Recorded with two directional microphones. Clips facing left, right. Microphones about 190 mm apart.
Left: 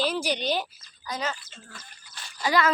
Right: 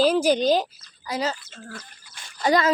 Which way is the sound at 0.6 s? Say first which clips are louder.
Right 5 dB; 30° right (ahead or behind).